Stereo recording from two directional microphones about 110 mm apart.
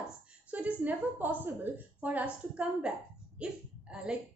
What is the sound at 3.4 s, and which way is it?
Hiccup, 10° right (ahead or behind).